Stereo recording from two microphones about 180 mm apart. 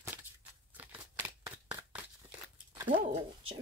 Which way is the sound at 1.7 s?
10° right (ahead or behind).